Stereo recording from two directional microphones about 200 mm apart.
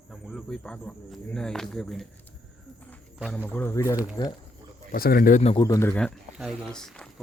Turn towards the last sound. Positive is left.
turn(degrees=5)  # may be behind; listen again after turning